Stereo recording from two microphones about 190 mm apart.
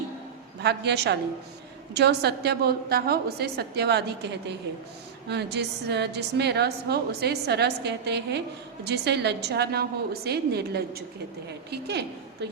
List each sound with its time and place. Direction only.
0.6 s a woman's voice: 60° right (ahead or behind)
5.3 s a woman's voice: 60° right (ahead or behind)